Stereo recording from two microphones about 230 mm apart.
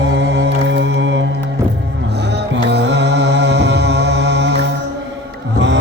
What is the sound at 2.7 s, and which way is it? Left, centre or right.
Mantra, right.